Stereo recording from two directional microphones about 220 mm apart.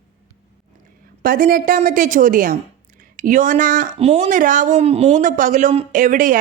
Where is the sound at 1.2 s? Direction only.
40° right (ahead or behind).